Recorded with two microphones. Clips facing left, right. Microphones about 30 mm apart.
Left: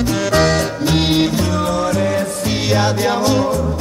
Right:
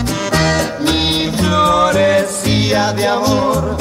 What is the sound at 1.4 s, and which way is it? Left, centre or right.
Music, right.